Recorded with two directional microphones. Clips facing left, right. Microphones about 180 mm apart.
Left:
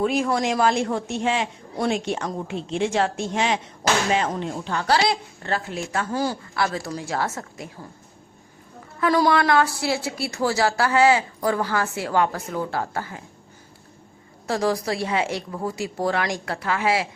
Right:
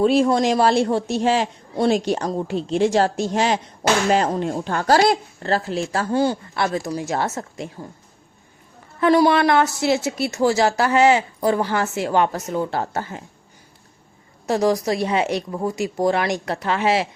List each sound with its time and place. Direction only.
0.0 s a man's voice: 30° right (ahead or behind)
9.0 s speech: 20° right (ahead or behind)
14.4 s speech: 20° right (ahead or behind)